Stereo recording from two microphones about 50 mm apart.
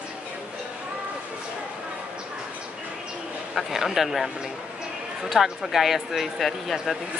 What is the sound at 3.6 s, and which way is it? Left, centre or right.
Speech, centre.